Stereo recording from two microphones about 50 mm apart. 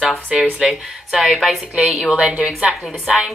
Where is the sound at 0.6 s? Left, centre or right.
Centre.